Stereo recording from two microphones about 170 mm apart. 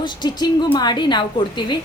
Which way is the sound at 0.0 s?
25° left (ahead or behind).